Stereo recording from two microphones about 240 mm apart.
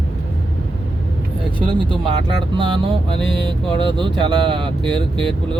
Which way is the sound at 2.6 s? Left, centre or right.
Right.